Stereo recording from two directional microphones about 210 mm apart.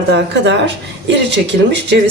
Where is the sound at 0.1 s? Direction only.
55° right (ahead or behind).